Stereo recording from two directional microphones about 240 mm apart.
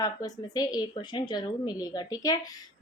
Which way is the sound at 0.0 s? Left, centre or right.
Centre.